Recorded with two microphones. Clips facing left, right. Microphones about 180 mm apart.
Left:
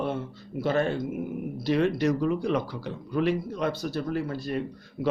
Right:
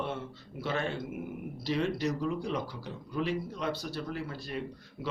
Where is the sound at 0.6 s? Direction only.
45° left (ahead or behind).